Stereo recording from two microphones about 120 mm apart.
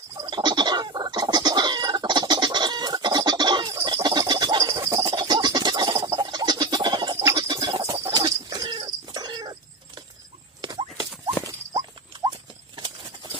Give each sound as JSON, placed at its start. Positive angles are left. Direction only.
{"t": 0.3, "sound": "chicken", "side_deg": -40}
{"t": 6.2, "sound": "a sound", "side_deg": -40}
{"t": 7.3, "sound": "bird", "side_deg": -35}
{"t": 7.8, "sound": "cat", "side_deg": -30}
{"t": 10.6, "sound": "horse", "side_deg": -35}
{"t": 11.4, "sound": "rodents", "side_deg": -30}